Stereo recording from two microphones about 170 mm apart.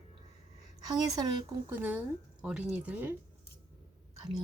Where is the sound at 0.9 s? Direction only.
25° right (ahead or behind).